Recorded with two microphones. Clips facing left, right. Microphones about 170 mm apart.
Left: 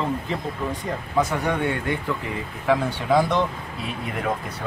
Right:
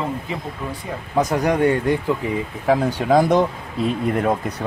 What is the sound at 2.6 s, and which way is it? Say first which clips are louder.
Speech: right 3 dB; 40° right (ahead or behind).